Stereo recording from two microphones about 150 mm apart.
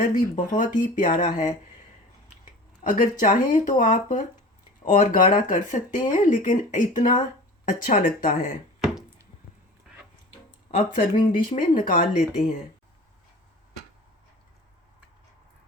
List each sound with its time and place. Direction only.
0.1 s speech: 60° left (ahead or behind)
10.9 s speech: 65° left (ahead or behind)